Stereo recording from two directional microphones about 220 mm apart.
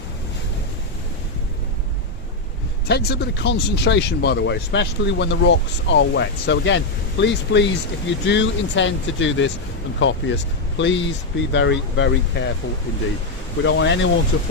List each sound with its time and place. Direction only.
2.8 s speech: 45° left (ahead or behind)
13.7 s speech: 55° left (ahead or behind)